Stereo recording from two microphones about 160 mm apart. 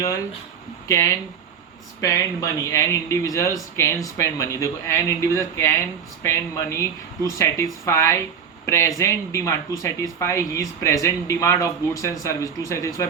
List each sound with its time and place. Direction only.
0.0 s speech: 20° left (ahead or behind)